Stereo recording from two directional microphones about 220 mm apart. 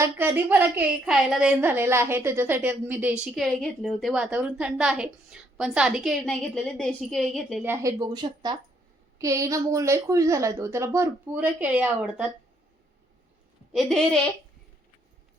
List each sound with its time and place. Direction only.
0.0 s a woman's voice: 10° right (ahead or behind)
7.7 s a woman's voice: 15° right (ahead or behind)
13.7 s a woman's voice: centre (ahead or behind)